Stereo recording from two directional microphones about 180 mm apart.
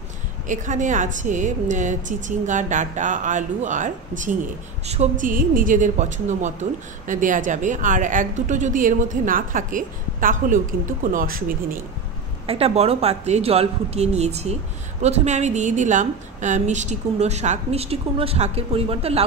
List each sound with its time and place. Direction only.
0.5 s a woman's voice: 45° right (ahead or behind)
5.2 s a woman's voice: 50° right (ahead or behind)
12.4 s speech: 35° right (ahead or behind)